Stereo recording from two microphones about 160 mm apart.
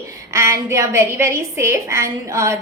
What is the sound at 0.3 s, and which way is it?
A woman's voice, 20° right (ahead or behind).